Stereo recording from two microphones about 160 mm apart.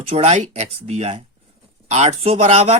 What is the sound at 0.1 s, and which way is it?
Speech, 40° right (ahead or behind).